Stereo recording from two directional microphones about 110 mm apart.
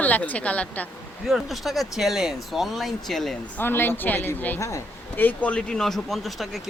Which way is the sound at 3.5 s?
20° left (ahead or behind).